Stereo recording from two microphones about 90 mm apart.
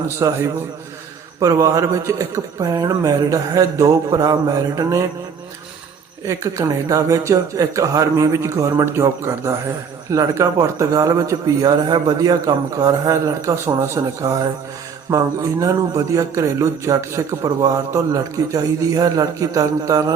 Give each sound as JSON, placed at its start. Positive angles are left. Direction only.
{"t": 0.2, "sound": "a man's voice", "side_deg": -30}
{"t": 6.2, "sound": "a man's voice", "side_deg": -35}
{"t": 13.1, "sound": "a man's voice", "side_deg": -35}